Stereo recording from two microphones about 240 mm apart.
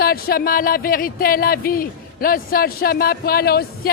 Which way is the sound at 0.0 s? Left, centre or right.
Left.